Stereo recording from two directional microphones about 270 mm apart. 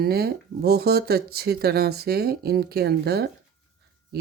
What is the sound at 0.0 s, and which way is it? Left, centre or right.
Speech, right.